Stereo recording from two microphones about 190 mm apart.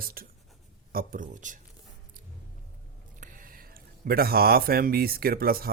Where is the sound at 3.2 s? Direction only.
45° right (ahead or behind).